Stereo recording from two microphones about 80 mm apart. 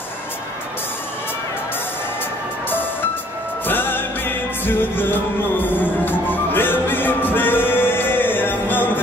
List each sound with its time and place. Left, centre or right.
3.6 s music: left